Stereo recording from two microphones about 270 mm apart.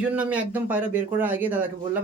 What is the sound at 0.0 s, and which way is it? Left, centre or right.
Speech, centre.